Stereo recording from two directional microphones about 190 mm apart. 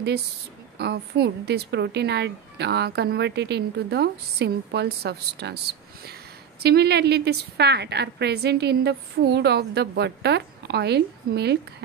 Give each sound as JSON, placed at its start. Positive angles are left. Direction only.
{"t": 0.7, "sound": "speech", "side_deg": -60}